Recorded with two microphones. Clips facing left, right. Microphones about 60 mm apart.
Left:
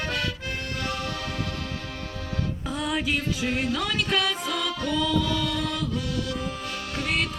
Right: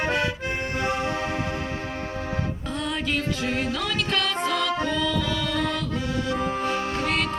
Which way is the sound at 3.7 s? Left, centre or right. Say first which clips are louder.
Even; centre.